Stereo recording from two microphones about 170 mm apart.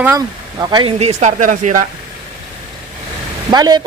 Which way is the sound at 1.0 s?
40° right (ahead or behind).